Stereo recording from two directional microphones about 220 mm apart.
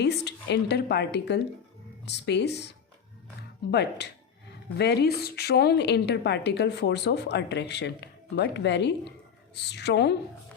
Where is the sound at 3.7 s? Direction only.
50° left (ahead or behind).